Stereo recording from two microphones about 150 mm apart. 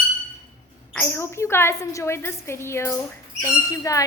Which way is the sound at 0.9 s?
15° left (ahead or behind).